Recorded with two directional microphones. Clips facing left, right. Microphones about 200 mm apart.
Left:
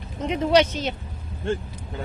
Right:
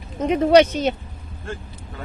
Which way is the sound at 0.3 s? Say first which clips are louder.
Right 5 dB; 55° right (ahead or behind).